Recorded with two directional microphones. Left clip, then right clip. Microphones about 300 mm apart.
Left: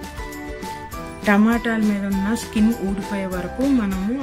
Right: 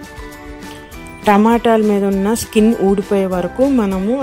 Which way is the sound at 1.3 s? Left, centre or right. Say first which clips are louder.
Right 8 dB; centre.